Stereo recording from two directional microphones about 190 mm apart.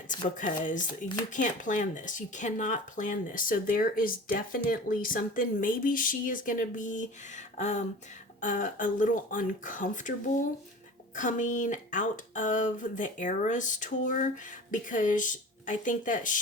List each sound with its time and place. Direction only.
0.3 s speech: 45° left (ahead or behind)